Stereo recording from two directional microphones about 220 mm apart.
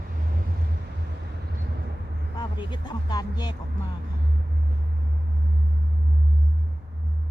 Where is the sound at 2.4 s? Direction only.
20° left (ahead or behind).